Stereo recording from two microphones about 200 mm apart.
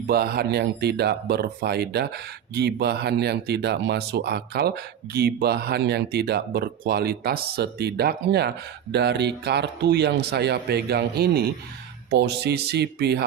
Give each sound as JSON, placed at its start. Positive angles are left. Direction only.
{"t": 0.1, "sound": "speech", "side_deg": -50}